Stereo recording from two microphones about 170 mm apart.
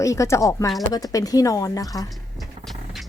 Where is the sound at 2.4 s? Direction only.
Centre (ahead or behind).